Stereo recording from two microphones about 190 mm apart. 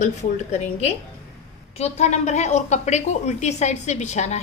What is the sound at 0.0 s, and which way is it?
A woman's voice, 35° left (ahead or behind).